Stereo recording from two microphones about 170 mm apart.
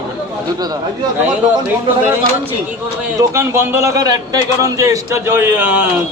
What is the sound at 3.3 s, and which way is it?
A man's voice, 15° right (ahead or behind).